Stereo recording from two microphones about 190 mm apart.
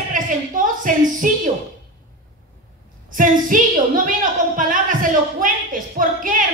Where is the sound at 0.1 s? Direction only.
45° right (ahead or behind).